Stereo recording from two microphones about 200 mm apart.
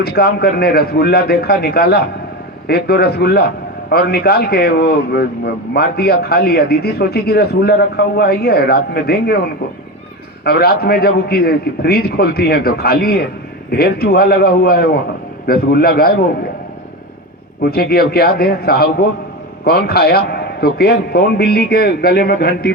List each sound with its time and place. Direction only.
0.0 s a man's voice: 55° left (ahead or behind)
17.6 s a man's voice: 50° left (ahead or behind)